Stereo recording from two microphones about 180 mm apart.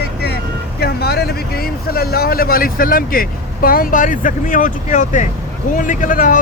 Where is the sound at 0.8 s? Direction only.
60° left (ahead or behind).